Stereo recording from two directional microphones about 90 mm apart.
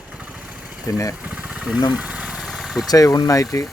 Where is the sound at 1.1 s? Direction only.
15° right (ahead or behind).